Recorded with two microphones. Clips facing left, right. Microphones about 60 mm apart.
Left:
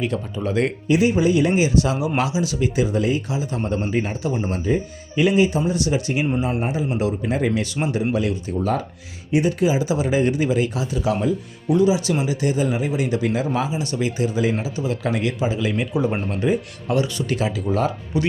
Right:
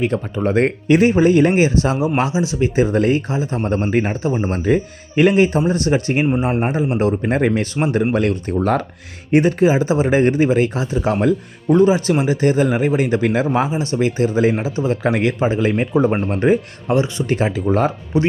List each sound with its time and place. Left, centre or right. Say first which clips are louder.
0.0 s speech: right 5 dB; right
4.6 s speech: right 5 dB; right
8.1 s speech: right 5 dB; right
11.2 s speech: right 5 dB; right
16.3 s speech: right 6 dB; right
16.9 s speech: right 4 dB; right